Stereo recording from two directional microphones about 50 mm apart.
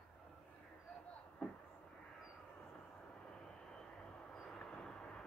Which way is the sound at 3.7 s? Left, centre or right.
Centre.